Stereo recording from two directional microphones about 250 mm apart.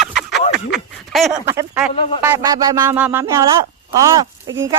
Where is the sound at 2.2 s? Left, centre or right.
Centre.